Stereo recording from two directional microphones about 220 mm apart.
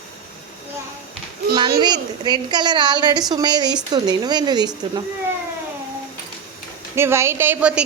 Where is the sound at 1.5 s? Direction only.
20° right (ahead or behind).